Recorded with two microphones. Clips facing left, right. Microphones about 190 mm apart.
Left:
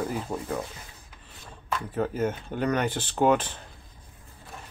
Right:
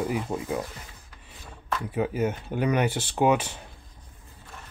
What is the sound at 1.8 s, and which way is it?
Speech, 10° right (ahead or behind).